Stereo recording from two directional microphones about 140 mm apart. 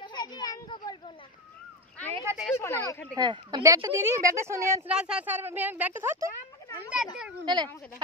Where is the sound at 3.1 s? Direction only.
30° right (ahead or behind).